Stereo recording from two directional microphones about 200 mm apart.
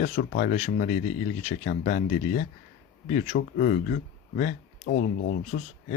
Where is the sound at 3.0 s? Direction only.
35° left (ahead or behind).